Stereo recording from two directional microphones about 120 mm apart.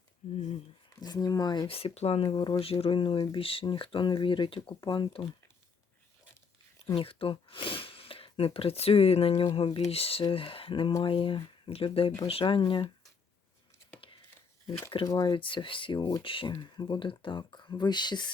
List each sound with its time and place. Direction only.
0.2 s speech: 75° left (ahead or behind)
0.9 s speech: 35° left (ahead or behind)
1.6 s speech: 50° left (ahead or behind)
2.2 s speech: 40° left (ahead or behind)
4.7 s speech: 35° left (ahead or behind)
6.9 s speech: 50° left (ahead or behind)
15.0 s speech: 30° left (ahead or behind)